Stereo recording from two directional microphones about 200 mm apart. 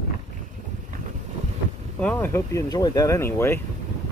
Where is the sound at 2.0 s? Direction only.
10° left (ahead or behind).